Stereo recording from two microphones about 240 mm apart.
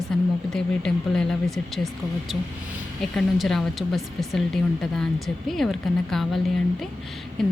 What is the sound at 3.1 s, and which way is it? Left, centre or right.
A woman's voice, centre.